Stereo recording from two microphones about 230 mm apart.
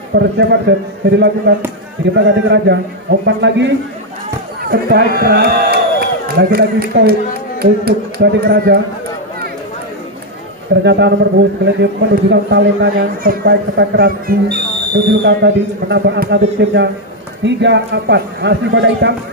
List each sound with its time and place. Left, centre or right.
0.1 s a man's voice: right
10.8 s a man's voice: right